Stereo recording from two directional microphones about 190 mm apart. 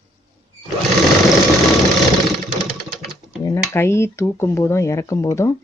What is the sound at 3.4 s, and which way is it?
Speech, 15° left (ahead or behind).